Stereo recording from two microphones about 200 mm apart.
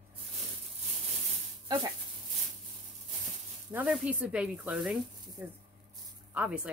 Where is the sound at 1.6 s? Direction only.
20° right (ahead or behind).